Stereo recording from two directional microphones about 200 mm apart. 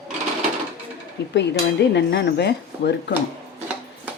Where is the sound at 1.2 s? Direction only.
60° left (ahead or behind).